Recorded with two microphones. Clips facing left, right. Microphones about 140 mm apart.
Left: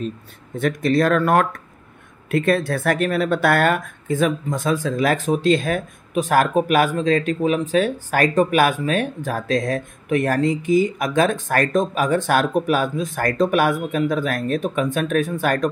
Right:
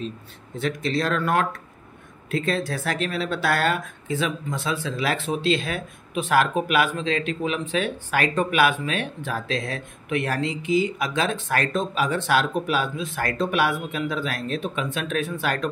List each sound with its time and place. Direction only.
0.6 s speech: 50° left (ahead or behind)